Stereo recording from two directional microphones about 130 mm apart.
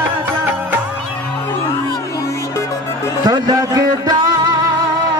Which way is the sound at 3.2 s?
30° right (ahead or behind).